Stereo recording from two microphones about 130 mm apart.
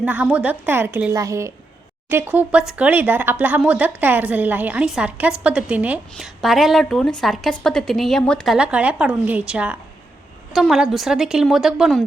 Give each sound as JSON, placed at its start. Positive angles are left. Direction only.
{"t": 0.0, "sound": "a woman's voice", "side_deg": -10}
{"t": 8.5, "sound": "a woman's voice", "side_deg": -10}